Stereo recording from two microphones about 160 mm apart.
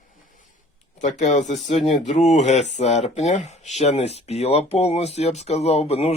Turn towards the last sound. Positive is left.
turn(degrees=40)  # may be behind; listen again after turning